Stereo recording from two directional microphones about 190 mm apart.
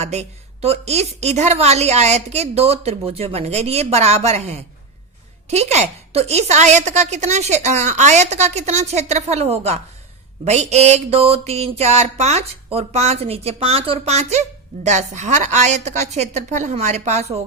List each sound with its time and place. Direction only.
0.0 s a woman's voice: 35° right (ahead or behind)